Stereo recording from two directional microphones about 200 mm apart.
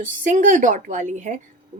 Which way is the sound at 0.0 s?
40° right (ahead or behind).